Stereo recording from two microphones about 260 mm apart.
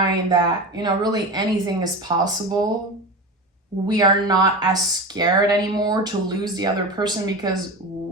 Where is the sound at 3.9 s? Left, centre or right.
Centre.